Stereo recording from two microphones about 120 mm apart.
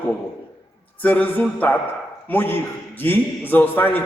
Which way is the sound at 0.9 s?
15° left (ahead or behind).